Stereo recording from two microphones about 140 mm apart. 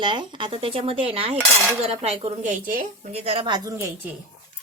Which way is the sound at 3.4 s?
25° right (ahead or behind).